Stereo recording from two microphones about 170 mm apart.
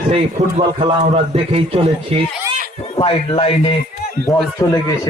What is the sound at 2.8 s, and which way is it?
Speech, 35° left (ahead or behind).